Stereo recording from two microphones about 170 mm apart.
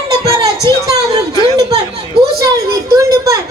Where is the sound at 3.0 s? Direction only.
20° right (ahead or behind).